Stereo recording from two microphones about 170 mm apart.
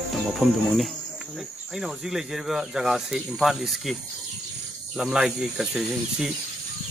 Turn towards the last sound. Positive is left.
turn(degrees=0)  # may be behind; listen again after turning